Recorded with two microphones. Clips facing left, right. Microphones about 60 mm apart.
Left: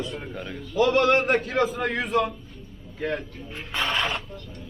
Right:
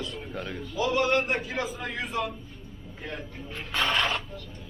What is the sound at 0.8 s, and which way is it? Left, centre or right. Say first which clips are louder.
A man's voice: left 5 dB; left.